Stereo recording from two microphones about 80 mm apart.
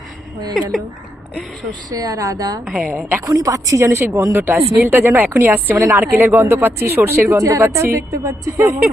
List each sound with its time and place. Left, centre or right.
1.9 s speech: right
2.6 s a woman's voice: centre
3.2 s speech: right
6.0 s speech: right